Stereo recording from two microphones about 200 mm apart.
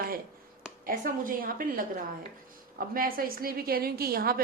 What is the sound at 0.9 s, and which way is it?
A woman's voice, 45° right (ahead or behind).